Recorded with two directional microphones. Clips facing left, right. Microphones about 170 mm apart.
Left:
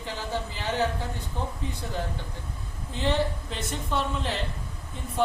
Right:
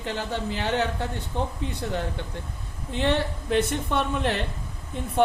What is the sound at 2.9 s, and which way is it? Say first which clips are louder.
A woman's voice: right 2 dB; 65° right (ahead or behind).